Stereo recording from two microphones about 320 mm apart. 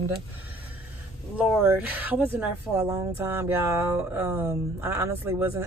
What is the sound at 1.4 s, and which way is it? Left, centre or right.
Speech, centre.